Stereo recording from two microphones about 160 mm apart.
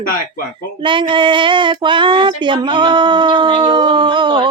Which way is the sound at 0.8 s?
30° right (ahead or behind).